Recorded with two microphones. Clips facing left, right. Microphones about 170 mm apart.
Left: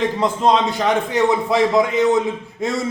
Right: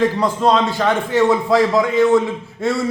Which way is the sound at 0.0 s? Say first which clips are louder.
Right 2 dB; 20° left (ahead or behind).